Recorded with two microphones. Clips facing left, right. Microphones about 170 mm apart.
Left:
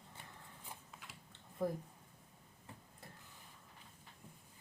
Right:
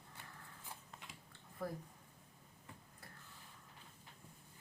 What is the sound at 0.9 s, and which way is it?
Biting, 5° left (ahead or behind).